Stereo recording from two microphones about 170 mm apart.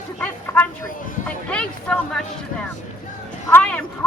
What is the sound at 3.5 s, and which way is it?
Speech, 5° left (ahead or behind).